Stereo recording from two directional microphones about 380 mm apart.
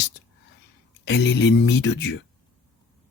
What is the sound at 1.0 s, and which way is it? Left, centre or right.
Speech, left.